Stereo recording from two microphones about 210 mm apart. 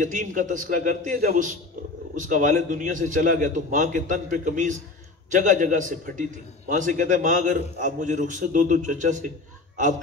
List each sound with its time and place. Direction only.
0.0 s a man's voice: 40° right (ahead or behind)